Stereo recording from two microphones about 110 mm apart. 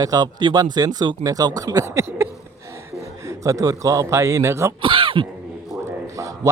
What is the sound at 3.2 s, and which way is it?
A man's voice, 30° right (ahead or behind).